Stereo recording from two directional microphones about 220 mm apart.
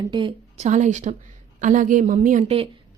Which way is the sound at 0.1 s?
20° right (ahead or behind).